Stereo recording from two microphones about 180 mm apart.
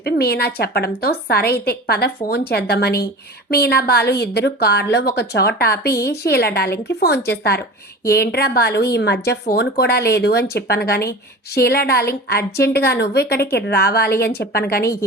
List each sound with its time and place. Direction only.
0.0 s a woman's voice: 60° left (ahead or behind)